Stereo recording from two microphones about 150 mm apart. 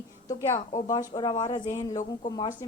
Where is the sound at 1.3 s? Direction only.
50° left (ahead or behind).